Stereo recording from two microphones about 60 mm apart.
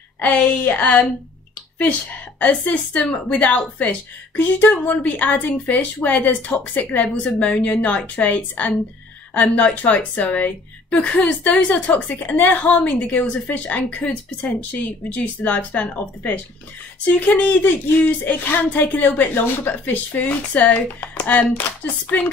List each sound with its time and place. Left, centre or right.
0.2 s a woman's voice: left